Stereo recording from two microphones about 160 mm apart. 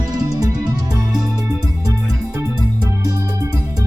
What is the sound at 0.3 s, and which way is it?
Music, 20° right (ahead or behind).